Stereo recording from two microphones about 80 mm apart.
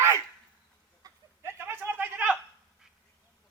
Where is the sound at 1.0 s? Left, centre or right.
Right.